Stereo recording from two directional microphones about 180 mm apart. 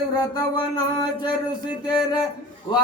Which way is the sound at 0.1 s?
20° left (ahead or behind).